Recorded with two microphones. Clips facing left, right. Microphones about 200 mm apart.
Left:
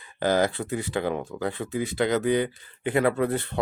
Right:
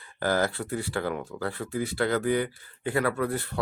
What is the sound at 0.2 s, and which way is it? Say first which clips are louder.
Speech: left 3 dB; 20° left (ahead or behind).